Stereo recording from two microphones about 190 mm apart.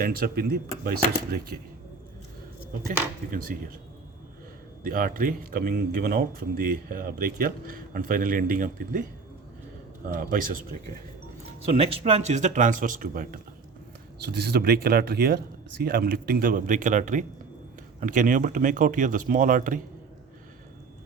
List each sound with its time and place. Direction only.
0.0 s a man's voice: 55° right (ahead or behind)
3.3 s a man's voice: 50° right (ahead or behind)
4.8 s a man's voice: 45° right (ahead or behind)
10.1 s a man's voice: 45° right (ahead or behind)
11.8 s speech: 30° right (ahead or behind)
14.2 s a man's voice: 60° right (ahead or behind)